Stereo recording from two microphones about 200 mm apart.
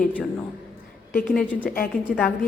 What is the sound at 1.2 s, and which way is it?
Speech, 5° left (ahead or behind).